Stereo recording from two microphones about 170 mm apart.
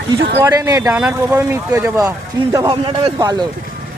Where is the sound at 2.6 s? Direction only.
30° right (ahead or behind).